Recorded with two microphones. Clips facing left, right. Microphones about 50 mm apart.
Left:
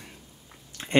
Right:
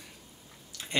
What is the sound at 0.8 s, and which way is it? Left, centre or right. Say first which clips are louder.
Chewing: left 4 dB; left.